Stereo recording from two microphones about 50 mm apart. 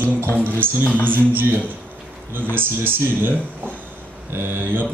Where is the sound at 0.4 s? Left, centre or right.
Right.